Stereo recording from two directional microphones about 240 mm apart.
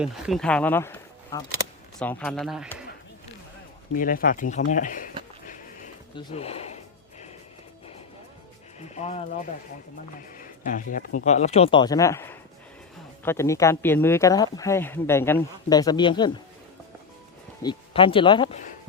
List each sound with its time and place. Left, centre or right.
0.0 s speech: centre
3.9 s speech: left
6.1 s speech: left
8.8 s speech: left
17.6 s speech: centre